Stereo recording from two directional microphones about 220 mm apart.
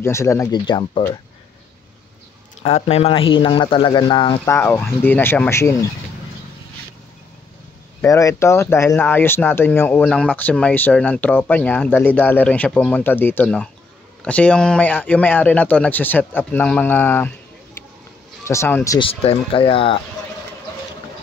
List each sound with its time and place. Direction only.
0.0 s speech: 10° left (ahead or behind)
2.6 s speech: 30° left (ahead or behind)
4.5 s speech: 10° left (ahead or behind)
8.0 s speech: 15° left (ahead or behind)
18.4 s speech: 10° left (ahead or behind)
18.9 s speech: 25° left (ahead or behind)